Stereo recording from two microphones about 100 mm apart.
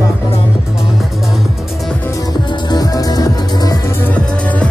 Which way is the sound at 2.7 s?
40° left (ahead or behind).